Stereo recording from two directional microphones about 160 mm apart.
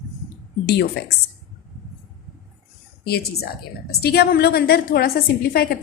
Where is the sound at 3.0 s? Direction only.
80° left.